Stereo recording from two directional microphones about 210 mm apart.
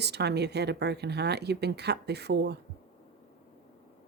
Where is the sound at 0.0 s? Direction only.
50° right (ahead or behind).